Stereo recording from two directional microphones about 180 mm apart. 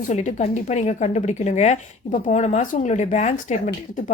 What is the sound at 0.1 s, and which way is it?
A woman's voice, 40° left (ahead or behind).